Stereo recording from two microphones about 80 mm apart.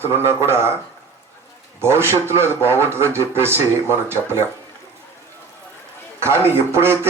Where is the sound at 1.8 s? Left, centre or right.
Right.